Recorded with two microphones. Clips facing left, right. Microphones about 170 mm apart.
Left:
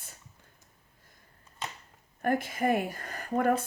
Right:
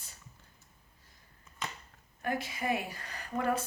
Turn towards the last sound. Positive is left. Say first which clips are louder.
# left 5 dB
turn(degrees=50)  # may be behind; listen again after turning